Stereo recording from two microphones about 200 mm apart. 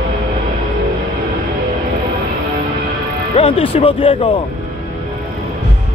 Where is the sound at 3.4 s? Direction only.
30° left (ahead or behind).